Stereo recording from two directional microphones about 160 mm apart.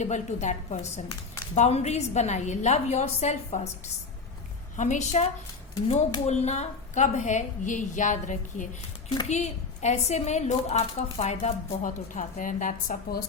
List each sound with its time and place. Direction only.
0.0 s a woman's voice: 50° left (ahead or behind)
4.8 s a woman's voice: 50° left (ahead or behind)